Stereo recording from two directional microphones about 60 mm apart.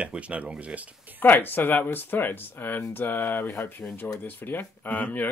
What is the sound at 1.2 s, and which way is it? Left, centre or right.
Speech, left.